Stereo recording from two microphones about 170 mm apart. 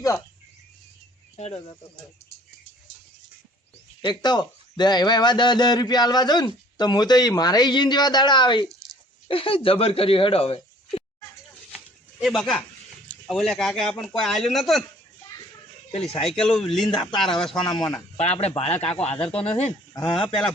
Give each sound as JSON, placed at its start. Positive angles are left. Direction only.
{"t": 1.4, "sound": "speech", "side_deg": 40}
{"t": 4.0, "sound": "a man's voice", "side_deg": 25}
{"t": 12.2, "sound": "speech", "side_deg": 0}
{"t": 16.0, "sound": "speech", "side_deg": 30}
{"t": 16.4, "sound": "speech", "side_deg": 5}
{"t": 16.9, "sound": "a man's voice", "side_deg": 25}
{"t": 18.2, "sound": "speech", "side_deg": 40}
{"t": 19.1, "sound": "speech", "side_deg": 5}
{"t": 19.4, "sound": "speech", "side_deg": 35}